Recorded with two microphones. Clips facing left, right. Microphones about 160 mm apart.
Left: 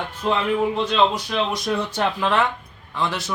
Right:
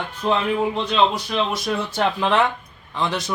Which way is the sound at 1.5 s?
5° right (ahead or behind).